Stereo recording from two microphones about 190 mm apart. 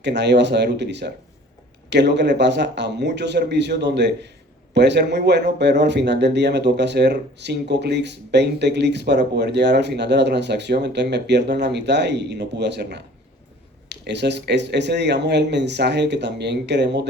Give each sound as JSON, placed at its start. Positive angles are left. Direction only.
{"t": 0.0, "sound": "speech", "side_deg": -65}